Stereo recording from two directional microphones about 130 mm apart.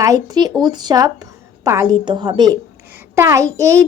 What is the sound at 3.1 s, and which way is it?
Speech, 20° right (ahead or behind).